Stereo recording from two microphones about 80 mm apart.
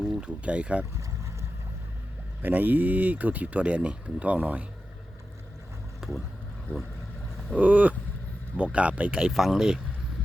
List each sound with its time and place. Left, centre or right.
0.0 s speech: centre
0.9 s boat: right
2.4 s speech: right
6.0 s vehicle: centre
7.5 s speech: centre